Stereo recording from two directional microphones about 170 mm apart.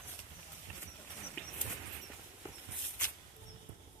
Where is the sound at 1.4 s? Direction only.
5° left (ahead or behind).